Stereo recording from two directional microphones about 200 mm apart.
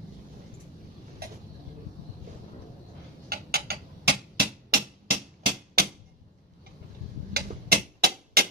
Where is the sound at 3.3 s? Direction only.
50° right (ahead or behind).